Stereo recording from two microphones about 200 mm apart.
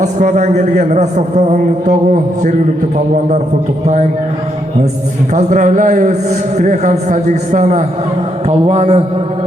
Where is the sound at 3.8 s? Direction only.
35° right (ahead or behind).